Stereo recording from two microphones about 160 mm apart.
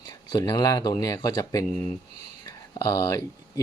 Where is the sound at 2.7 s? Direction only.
20° left (ahead or behind).